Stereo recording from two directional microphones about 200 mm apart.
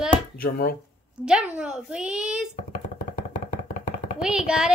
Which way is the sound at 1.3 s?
5° right (ahead or behind).